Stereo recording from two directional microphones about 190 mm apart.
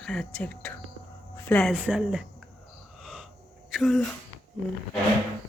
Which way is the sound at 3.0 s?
5° right (ahead or behind).